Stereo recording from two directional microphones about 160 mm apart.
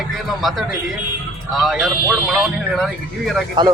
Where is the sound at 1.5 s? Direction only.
5° right (ahead or behind).